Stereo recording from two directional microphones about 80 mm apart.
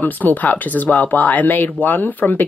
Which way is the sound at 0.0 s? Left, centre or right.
Left.